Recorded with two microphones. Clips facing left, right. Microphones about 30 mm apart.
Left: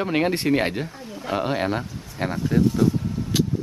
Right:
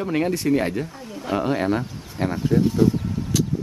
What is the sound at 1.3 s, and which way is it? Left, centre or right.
Speech, centre.